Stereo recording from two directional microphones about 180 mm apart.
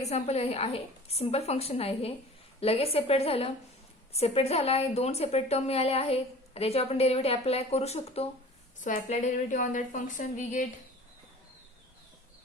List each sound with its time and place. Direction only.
0.0 s a woman's voice: 35° left (ahead or behind)